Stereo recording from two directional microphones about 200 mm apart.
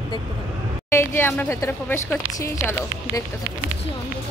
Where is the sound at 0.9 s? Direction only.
10° left (ahead or behind).